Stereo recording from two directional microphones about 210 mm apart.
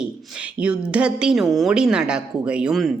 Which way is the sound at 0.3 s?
5° right (ahead or behind).